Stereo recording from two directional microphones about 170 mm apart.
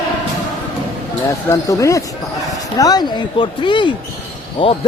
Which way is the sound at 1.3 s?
20° left (ahead or behind).